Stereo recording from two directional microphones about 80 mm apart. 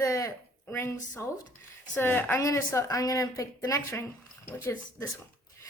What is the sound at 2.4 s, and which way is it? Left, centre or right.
Speech, left.